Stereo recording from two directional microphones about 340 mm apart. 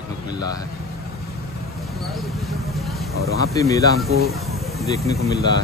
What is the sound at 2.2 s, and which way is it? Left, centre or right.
Vehicle, centre.